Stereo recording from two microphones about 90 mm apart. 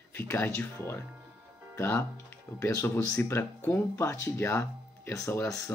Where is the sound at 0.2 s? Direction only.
25° left (ahead or behind).